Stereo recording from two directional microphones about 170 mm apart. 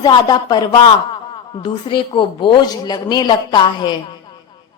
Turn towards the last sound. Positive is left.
turn(degrees=25)  # may be behind; listen again after turning